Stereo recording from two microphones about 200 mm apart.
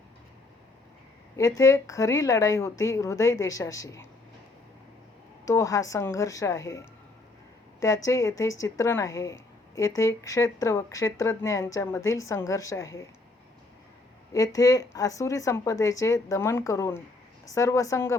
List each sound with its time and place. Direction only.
1.4 s a woman's voice: 15° left (ahead or behind)
5.5 s a woman's voice: 15° left (ahead or behind)
14.3 s a woman's voice: 15° left (ahead or behind)